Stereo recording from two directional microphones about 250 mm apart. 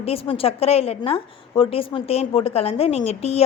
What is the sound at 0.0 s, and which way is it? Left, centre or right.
A woman's voice, left.